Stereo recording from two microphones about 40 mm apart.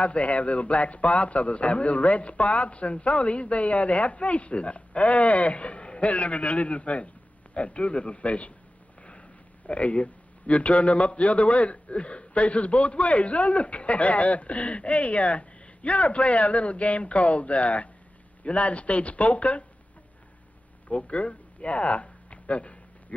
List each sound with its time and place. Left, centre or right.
0.0 s a man's voice: left
9.7 s a man's voice: left
20.9 s a sound: left